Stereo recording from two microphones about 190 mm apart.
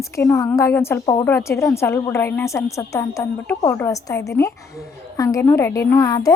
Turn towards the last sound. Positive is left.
turn(degrees=20)  # may be behind; listen again after turning